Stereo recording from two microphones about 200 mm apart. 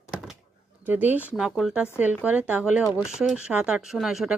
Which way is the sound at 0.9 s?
10° right (ahead or behind).